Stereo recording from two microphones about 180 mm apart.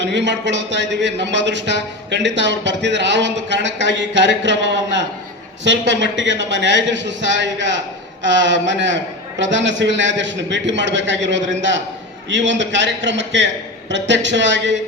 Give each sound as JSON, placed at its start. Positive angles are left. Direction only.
{"t": 0.0, "sound": "a man's voice", "side_deg": -75}